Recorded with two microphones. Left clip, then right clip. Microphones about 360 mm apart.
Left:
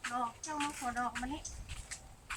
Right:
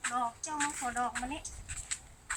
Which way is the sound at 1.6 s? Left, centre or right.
Centre.